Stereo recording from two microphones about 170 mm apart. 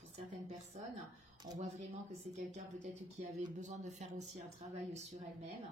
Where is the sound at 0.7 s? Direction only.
40° right (ahead or behind).